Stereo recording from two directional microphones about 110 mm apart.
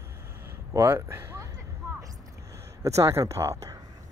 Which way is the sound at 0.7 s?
25° right (ahead or behind).